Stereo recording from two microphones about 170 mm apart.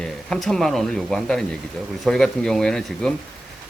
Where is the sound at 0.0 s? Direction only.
5° left (ahead or behind).